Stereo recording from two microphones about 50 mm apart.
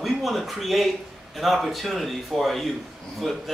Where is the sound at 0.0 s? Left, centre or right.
Centre.